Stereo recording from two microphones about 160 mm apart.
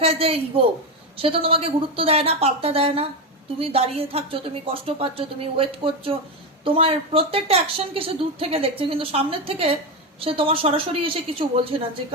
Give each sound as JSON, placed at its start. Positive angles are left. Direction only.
{"t": 0.0, "sound": "speech", "side_deg": -35}